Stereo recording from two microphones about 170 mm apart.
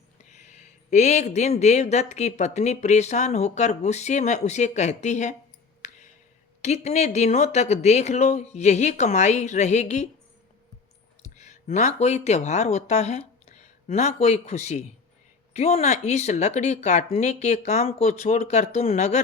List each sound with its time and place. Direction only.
0.3 s speech: 45° left (ahead or behind)
5.8 s a sound: 45° left (ahead or behind)
6.6 s speech: 40° left (ahead or behind)
11.2 s speech: 40° left (ahead or behind)